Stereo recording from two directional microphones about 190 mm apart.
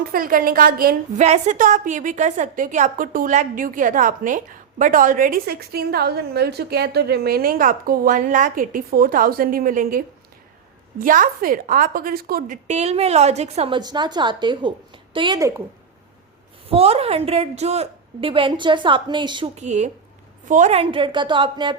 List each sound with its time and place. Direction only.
0.1 s a woman's voice: 50° right (ahead or behind)
1.2 s a woman's voice: 40° right (ahead or behind)
12.6 s a woman's voice: 35° right (ahead or behind); by 15.6 s 15° right (ahead or behind)
16.6 s a woman's voice: 30° right (ahead or behind)
19.5 s a woman's voice: 40° right (ahead or behind)